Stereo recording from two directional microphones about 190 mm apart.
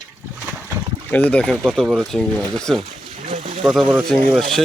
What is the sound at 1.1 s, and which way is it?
Speech, 5° left (ahead or behind).